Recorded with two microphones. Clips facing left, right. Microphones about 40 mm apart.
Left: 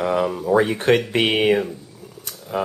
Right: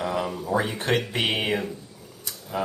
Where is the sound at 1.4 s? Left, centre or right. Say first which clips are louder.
Left 8 dB; centre.